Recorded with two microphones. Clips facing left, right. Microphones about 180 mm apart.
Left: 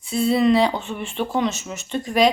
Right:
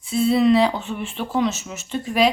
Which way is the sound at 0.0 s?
Centre (ahead or behind).